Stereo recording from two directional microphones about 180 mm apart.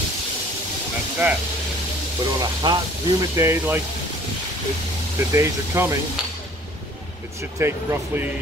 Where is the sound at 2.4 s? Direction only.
25° right (ahead or behind).